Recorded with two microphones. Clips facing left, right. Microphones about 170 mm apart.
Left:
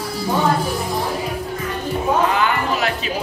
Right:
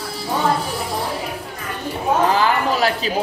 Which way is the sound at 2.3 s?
35° right (ahead or behind).